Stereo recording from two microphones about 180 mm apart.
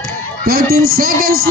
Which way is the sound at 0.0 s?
50° right (ahead or behind).